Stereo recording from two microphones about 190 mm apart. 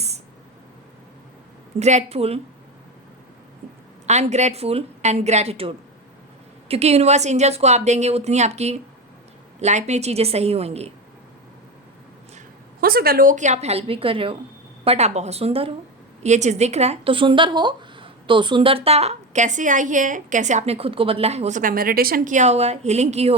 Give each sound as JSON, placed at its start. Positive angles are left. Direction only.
{"t": 1.8, "sound": "speech", "side_deg": -35}
{"t": 4.0, "sound": "speech", "side_deg": -35}
{"t": 12.8, "sound": "speech", "side_deg": -55}